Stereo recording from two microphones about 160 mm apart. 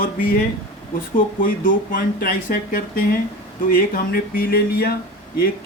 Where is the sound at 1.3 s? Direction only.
60° left (ahead or behind).